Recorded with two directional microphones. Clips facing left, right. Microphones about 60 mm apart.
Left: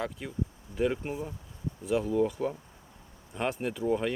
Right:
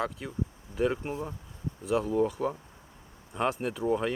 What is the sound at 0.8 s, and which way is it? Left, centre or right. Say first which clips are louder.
Speech: right 1 dB; centre.